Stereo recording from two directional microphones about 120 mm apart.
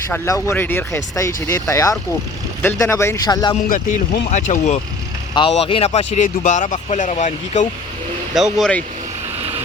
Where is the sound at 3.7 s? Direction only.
85° left.